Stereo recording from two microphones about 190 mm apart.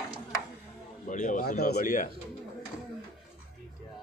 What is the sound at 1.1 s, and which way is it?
Speech, 45° left (ahead or behind).